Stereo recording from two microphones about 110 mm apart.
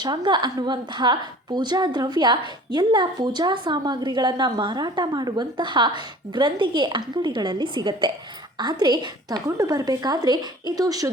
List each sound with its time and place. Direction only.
0.0 s a woman's voice: 40° right (ahead or behind)